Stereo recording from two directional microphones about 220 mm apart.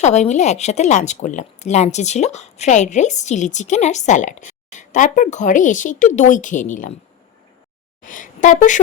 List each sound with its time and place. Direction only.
0.0 s speech: 30° left (ahead or behind)
8.0 s a woman's voice: 35° left (ahead or behind)